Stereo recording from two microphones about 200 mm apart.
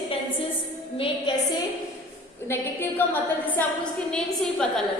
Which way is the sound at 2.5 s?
10° left (ahead or behind).